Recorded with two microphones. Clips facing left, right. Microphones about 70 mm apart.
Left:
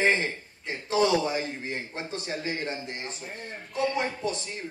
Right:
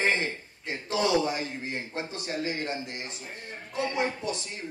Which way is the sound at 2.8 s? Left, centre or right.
Left.